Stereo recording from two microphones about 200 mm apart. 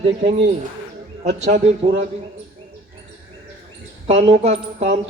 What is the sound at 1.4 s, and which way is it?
Speech, 35° right (ahead or behind).